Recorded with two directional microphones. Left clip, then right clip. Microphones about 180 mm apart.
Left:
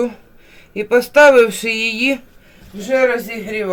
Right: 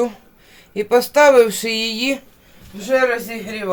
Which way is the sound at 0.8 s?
5° right (ahead or behind).